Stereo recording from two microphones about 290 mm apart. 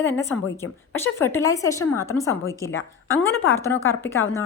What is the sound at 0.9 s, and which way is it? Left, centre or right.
A woman's voice, centre.